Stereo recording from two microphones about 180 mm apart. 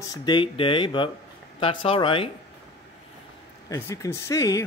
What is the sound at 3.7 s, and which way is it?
Speech, 15° left (ahead or behind).